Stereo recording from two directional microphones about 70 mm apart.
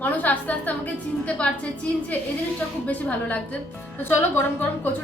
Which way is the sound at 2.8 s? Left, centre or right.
Left.